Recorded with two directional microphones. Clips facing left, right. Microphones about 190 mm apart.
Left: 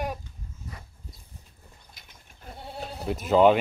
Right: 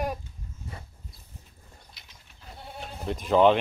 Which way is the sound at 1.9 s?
50° left (ahead or behind).